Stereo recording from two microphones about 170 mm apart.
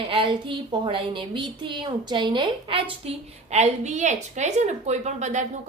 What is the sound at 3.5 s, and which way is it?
A woman's voice, 40° right (ahead or behind).